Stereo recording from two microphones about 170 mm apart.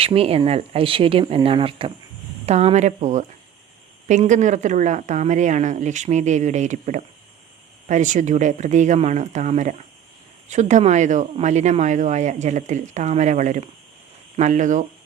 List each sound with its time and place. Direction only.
0.0 s speech: 35° right (ahead or behind)